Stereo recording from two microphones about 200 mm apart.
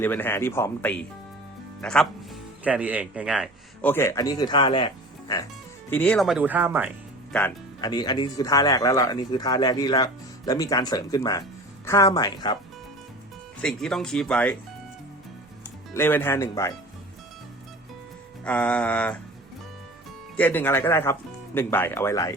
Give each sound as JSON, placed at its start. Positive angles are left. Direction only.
{"t": 0.0, "sound": "speech", "side_deg": 10}
{"t": 3.8, "sound": "speech", "side_deg": 10}
{"t": 5.9, "sound": "speech", "side_deg": 5}
{"t": 7.3, "sound": "speech", "side_deg": 5}
{"t": 7.8, "sound": "speech", "side_deg": 20}
{"t": 13.6, "sound": "speech", "side_deg": 5}
{"t": 16.0, "sound": "speech", "side_deg": 10}
{"t": 18.4, "sound": "speech", "side_deg": 5}
{"t": 20.3, "sound": "speech", "side_deg": 10}